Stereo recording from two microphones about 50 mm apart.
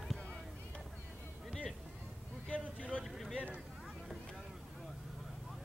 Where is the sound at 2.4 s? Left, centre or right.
Left.